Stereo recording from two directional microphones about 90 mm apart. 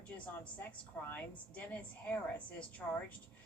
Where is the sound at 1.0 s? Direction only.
15° left (ahead or behind).